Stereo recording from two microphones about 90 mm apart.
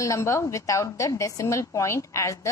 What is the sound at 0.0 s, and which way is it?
A woman's voice, 35° left (ahead or behind).